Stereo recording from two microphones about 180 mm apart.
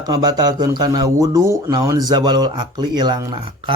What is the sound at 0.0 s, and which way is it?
Speech, 20° right (ahead or behind).